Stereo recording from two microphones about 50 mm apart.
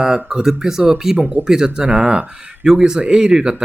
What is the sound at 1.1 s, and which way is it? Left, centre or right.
Speech, right.